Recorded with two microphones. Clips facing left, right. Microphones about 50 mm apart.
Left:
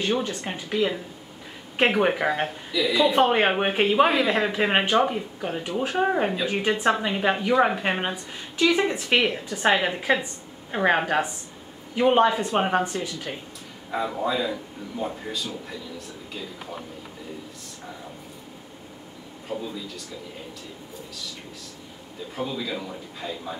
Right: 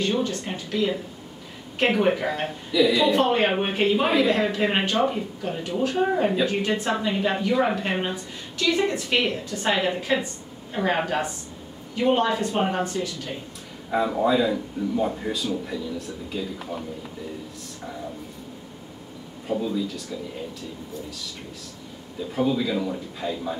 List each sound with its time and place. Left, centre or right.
0.0 s a woman's voice: centre
2.4 s speech: centre
3.1 s speech: centre
3.8 s a woman's voice: centre
10.7 s a woman's voice: left
13.8 s speech: centre
19.6 s speech: centre
22.3 s speech: centre